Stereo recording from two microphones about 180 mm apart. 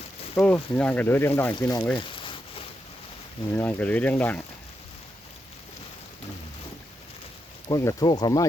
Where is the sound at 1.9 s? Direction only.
30° left (ahead or behind).